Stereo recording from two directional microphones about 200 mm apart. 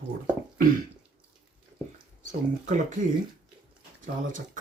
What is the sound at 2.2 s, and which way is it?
Speech, 40° right (ahead or behind).